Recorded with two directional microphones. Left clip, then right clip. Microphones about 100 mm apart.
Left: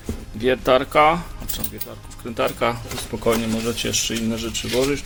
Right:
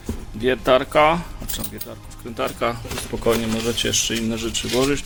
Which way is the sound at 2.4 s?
20° left (ahead or behind).